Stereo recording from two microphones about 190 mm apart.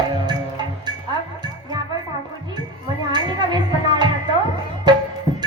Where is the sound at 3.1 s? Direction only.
20° right (ahead or behind).